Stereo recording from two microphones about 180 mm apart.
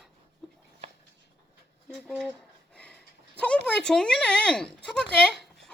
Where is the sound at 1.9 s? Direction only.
Centre (ahead or behind).